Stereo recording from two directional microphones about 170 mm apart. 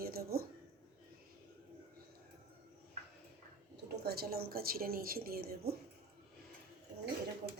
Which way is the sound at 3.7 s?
65° right (ahead or behind).